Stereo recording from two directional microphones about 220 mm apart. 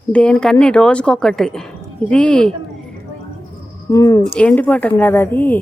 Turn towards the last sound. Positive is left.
turn(degrees=10)  # may be behind; listen again after turning